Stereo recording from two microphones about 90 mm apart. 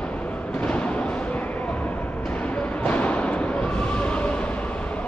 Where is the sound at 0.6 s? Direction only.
15° left (ahead or behind).